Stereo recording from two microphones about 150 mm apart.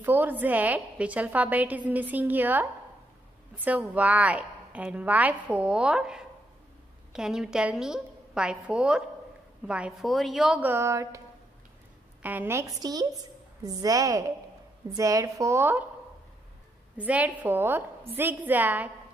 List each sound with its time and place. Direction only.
0.0 s a woman's voice: 10° right (ahead or behind)
12.2 s a woman's voice: 10° right (ahead or behind)
16.9 s a woman's voice: 10° right (ahead or behind)